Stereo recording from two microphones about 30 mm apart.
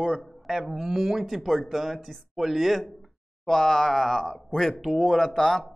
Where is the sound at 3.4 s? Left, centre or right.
Centre.